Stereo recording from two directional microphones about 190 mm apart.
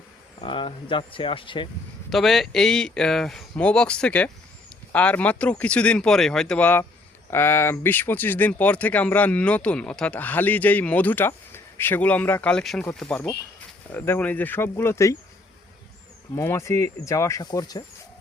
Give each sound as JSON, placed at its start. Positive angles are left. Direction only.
{"t": 0.4, "sound": "speech", "side_deg": 25}
{"t": 2.0, "sound": "speech", "side_deg": 0}
{"t": 16.3, "sound": "speech", "side_deg": 15}